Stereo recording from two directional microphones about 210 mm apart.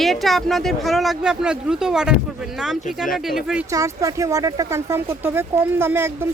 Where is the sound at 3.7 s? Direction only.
15° right (ahead or behind).